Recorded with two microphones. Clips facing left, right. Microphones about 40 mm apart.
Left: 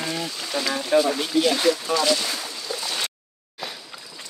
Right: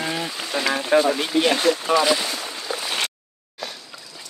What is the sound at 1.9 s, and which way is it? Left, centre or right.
Speech, right.